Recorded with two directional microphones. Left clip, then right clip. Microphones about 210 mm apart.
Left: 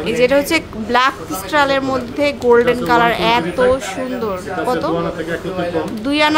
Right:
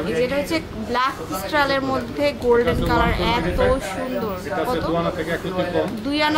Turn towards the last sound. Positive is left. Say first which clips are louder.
# left 6 dB
turn(degrees=25)  # may be behind; listen again after turning